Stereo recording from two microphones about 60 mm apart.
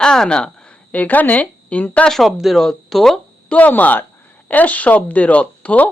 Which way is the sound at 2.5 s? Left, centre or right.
Centre.